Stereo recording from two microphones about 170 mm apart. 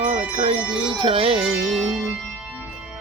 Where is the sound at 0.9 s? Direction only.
30° right (ahead or behind).